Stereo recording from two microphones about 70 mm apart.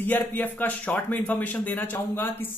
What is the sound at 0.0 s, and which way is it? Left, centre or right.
Speech, left.